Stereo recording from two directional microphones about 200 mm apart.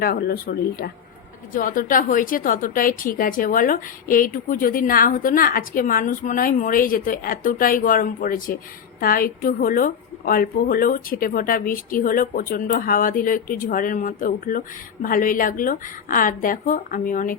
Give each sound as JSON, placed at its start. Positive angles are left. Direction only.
{"t": 0.0, "sound": "a woman's voice", "side_deg": 50}